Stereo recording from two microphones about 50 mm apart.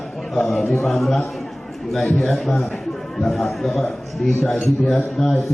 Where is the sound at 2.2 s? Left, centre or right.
Centre.